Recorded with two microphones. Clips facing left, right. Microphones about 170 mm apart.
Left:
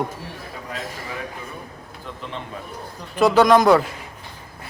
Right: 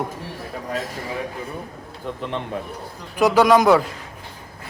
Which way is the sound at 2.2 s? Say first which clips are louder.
Right 6 dB; 65° right (ahead or behind).